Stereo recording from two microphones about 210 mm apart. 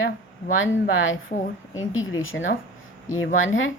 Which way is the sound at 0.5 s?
70° left (ahead or behind).